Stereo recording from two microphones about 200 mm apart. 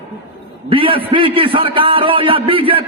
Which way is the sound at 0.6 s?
25° right (ahead or behind).